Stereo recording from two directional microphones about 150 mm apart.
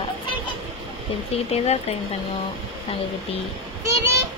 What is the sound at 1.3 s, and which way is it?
Speech, 45° left (ahead or behind).